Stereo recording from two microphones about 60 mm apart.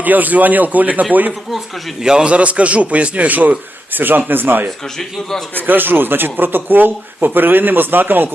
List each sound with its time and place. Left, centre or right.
0.0 s a man's voice: right
1.5 s a man's voice: centre
2.0 s a man's voice: centre; by 4.7 s right
4.9 s a man's voice: centre
5.6 s speech: right